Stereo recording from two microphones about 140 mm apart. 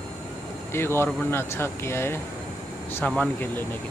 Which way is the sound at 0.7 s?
15° left (ahead or behind).